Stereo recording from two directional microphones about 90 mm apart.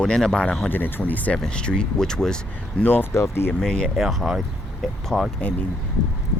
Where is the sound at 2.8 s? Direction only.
20° left (ahead or behind).